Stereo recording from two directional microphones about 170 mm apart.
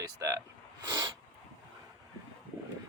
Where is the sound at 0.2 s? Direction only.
20° right (ahead or behind).